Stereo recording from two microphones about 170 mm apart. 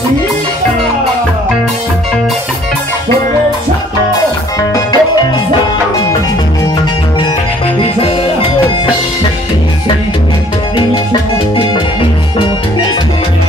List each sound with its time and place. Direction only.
4.6 s music: 20° left (ahead or behind)
11.5 s music: 30° left (ahead or behind)